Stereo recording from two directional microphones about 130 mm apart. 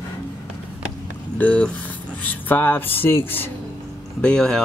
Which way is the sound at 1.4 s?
10° left (ahead or behind).